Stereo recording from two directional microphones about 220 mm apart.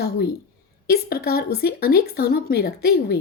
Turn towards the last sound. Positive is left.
turn(degrees=45)  # may be behind; listen again after turning